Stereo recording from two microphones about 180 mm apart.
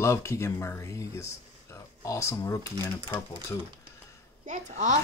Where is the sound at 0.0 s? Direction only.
15° left (ahead or behind).